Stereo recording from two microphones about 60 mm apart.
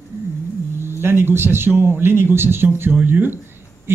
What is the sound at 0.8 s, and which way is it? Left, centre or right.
Speech, right.